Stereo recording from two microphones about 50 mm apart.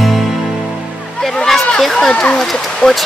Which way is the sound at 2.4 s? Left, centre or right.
Centre.